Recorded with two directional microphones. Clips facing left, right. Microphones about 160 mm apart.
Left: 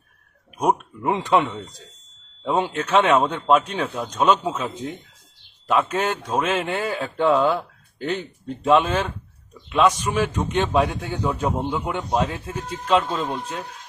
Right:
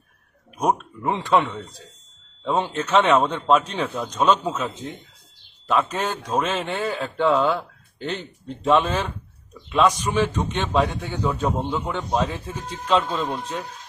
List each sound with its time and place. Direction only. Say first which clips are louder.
1.0 s a man's voice: left 1 dB; 20° left (ahead or behind)
2.9 s a man's voice: even; centre (ahead or behind)